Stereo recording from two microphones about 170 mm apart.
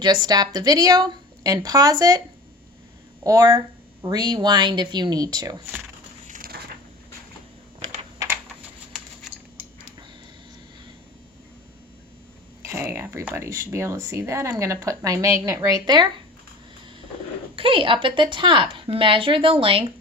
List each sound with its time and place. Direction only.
0.0 s a woman's voice: 25° right (ahead or behind)
3.2 s a woman's voice: 20° right (ahead or behind)
6.2 s crushing: 55° right (ahead or behind)
12.6 s speech: 15° right (ahead or behind)
17.6 s a woman's voice: 30° right (ahead or behind)